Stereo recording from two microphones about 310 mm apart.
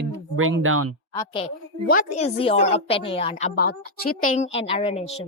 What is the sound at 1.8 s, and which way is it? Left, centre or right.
A woman's voice, left.